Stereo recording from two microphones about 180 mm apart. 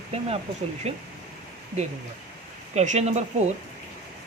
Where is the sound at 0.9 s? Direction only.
35° right (ahead or behind).